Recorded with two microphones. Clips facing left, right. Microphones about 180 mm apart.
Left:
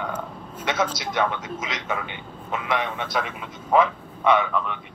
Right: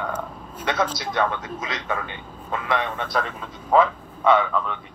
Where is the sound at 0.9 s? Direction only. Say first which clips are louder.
Right 1 dB; 20° left (ahead or behind).